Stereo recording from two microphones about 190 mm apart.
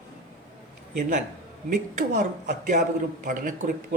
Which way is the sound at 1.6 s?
40° right (ahead or behind).